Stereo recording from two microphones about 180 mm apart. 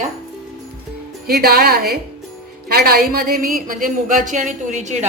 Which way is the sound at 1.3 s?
60° right (ahead or behind).